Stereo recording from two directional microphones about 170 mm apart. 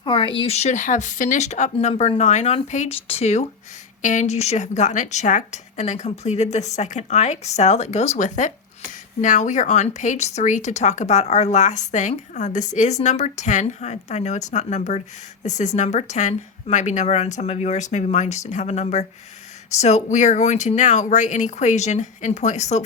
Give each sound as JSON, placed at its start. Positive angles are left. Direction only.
{"t": 0.0, "sound": "speech", "side_deg": 30}